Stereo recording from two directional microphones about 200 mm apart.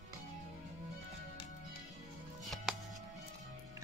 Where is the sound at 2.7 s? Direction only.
Centre (ahead or behind).